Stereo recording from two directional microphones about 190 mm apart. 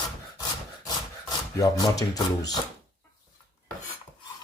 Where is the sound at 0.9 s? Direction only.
15° left (ahead or behind).